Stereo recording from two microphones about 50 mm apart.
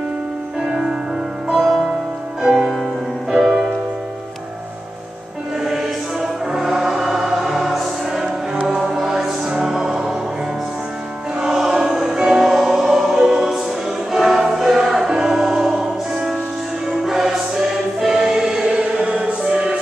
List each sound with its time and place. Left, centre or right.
0.7 s music: centre
2.5 s music: centre
5.6 s music: centre
11.3 s choir: centre
12.2 s music: centre
16.9 s choir: centre